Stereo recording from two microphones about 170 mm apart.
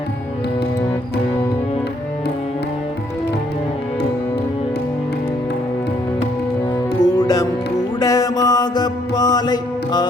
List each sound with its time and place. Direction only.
7.0 s music: 25° left (ahead or behind)
7.9 s mantra: 20° left (ahead or behind)